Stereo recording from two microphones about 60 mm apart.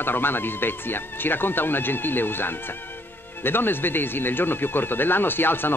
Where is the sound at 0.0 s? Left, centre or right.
Left.